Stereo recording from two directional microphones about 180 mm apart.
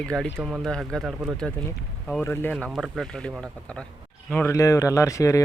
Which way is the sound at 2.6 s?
Centre (ahead or behind).